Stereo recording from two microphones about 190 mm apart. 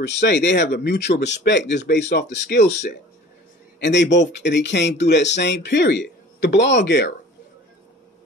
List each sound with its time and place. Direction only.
0.0 s speech: 60° left (ahead or behind)